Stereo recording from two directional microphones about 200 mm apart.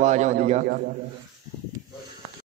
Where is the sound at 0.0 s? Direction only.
35° right (ahead or behind).